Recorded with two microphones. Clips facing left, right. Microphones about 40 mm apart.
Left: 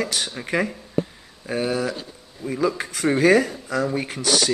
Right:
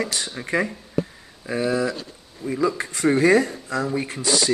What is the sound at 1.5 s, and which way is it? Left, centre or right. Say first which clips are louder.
Speech: right 1 dB; left.